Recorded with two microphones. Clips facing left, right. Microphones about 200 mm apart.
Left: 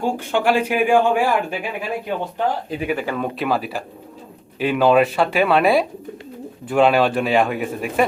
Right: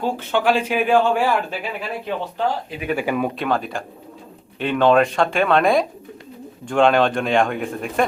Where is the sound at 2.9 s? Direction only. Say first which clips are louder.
Right 3 dB; 10° right (ahead or behind).